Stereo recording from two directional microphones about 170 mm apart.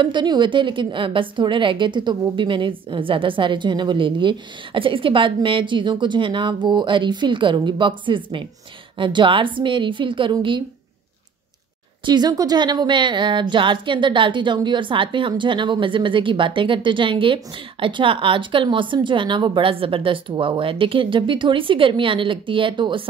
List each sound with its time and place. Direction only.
0.0 s speech: 25° right (ahead or behind)
12.0 s speech: 25° right (ahead or behind)